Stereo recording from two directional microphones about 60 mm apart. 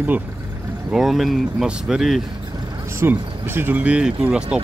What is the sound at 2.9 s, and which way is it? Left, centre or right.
Speech, right.